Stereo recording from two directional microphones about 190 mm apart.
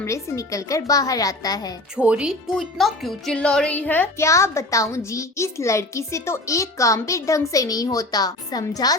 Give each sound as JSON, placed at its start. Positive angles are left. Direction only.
{"t": 0.0, "sound": "speech", "side_deg": 15}
{"t": 2.0, "sound": "speech", "side_deg": -5}